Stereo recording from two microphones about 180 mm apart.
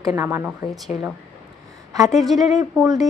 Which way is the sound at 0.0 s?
15° right (ahead or behind).